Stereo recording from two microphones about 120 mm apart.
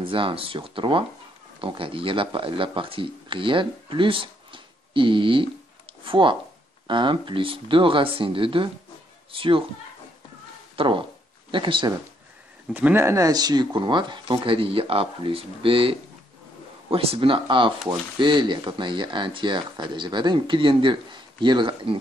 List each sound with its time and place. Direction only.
0.0 s speech: 45° right (ahead or behind)
10.8 s speech: 45° right (ahead or behind)
12.7 s speech: 20° right (ahead or behind); by 22.0 s 45° right (ahead or behind)